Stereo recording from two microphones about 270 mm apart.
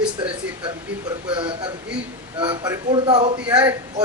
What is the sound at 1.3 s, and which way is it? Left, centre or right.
A man's voice, centre.